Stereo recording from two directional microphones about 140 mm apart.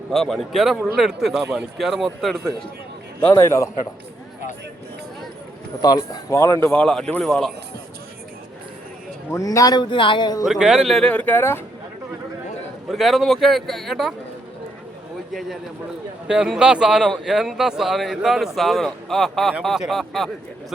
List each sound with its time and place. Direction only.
0.1 s speech: centre (ahead or behind)
3.2 s speech: 15° left (ahead or behind)
5.8 s speech: 25° left (ahead or behind)
6.7 s speech: 5° left (ahead or behind)
9.3 s speech: 25° left (ahead or behind)
10.4 s speech: 5° right (ahead or behind); by 11.6 s 15° left (ahead or behind)
12.9 s speech: centre (ahead or behind)
15.3 s speech: centre (ahead or behind)